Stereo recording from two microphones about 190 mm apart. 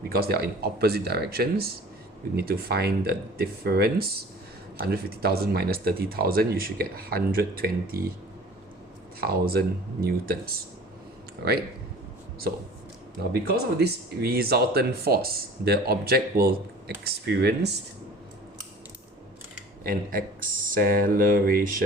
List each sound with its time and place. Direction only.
0.1 s speech: 55° right (ahead or behind)
9.2 s speech: 55° right (ahead or behind)
13.5 s speech: 55° right (ahead or behind)
19.8 s speech: 50° right (ahead or behind)